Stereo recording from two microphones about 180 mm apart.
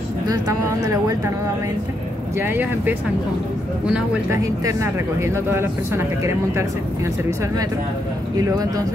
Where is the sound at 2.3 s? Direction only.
10° right (ahead or behind).